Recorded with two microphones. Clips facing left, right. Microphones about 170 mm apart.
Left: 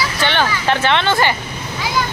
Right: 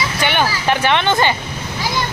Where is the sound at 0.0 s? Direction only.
15° right (ahead or behind).